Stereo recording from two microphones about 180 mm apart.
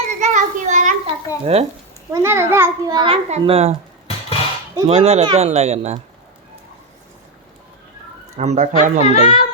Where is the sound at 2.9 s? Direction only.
30° right (ahead or behind).